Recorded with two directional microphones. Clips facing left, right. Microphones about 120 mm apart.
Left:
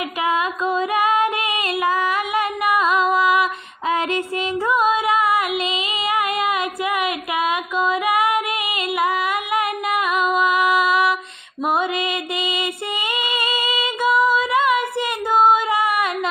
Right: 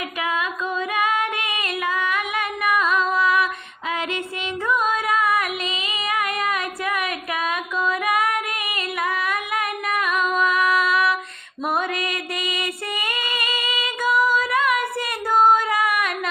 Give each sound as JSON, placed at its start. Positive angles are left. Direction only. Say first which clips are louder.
{"t": 0.2, "sound": "female singing", "louder": "left 5 dB", "side_deg": 30}
{"t": 3.2, "sound": "music", "louder": "left 3 dB", "side_deg": 25}
{"t": 4.6, "sound": "female singing", "louder": "left 3 dB", "side_deg": 30}
{"t": 11.6, "sound": "music", "louder": "left 3 dB", "side_deg": 20}